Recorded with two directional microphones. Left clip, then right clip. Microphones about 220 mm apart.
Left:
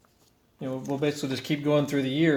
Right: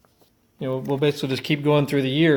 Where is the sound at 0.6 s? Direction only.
45° right (ahead or behind).